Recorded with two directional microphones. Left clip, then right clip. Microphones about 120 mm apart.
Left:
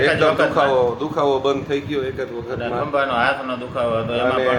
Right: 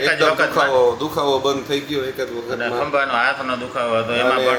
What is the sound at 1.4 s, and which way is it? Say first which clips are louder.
Speech: even; 45° left (ahead or behind).